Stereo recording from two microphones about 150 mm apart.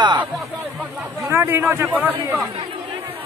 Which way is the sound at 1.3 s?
15° right (ahead or behind).